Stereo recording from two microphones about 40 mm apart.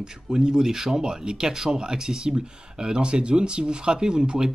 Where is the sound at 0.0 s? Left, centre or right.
Centre.